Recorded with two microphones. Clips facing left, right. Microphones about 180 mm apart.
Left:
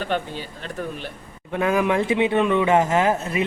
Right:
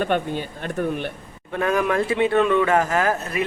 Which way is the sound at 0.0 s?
55° right (ahead or behind).